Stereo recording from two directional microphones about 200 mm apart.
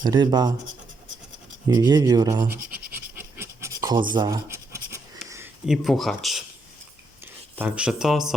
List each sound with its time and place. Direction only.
0.0 s speech: 20° right (ahead or behind)
1.6 s speech: 20° right (ahead or behind)
2.9 s a sound: 10° right (ahead or behind)
4.1 s scratch: 20° right (ahead or behind)
5.6 s speech: centre (ahead or behind)
7.5 s speech: 5° right (ahead or behind)